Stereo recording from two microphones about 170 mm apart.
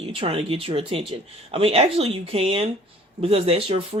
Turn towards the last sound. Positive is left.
turn(degrees=-35)  # may be behind; listen again after turning